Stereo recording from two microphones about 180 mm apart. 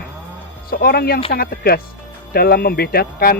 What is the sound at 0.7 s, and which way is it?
Speech, 60° left (ahead or behind).